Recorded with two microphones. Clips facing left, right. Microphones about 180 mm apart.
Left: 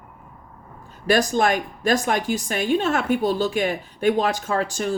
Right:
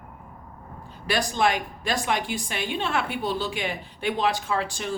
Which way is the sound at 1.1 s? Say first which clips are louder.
Left 5 dB; 45° left (ahead or behind).